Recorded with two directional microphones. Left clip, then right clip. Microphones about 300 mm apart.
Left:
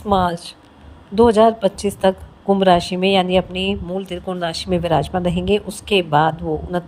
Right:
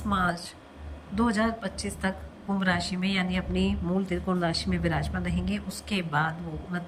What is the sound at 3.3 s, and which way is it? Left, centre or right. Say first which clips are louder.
Speech: left 12 dB; centre.